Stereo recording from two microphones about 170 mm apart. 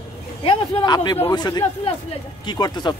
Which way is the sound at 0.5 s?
25° left (ahead or behind).